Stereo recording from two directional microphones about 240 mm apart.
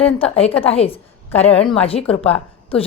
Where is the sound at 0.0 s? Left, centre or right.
Left.